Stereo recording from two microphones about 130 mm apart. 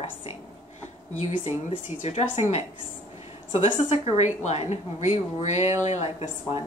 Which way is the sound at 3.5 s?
55° left (ahead or behind).